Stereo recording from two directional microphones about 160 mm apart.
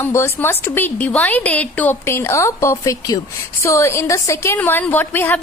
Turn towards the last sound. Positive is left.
turn(degrees=10)  # may be behind; listen again after turning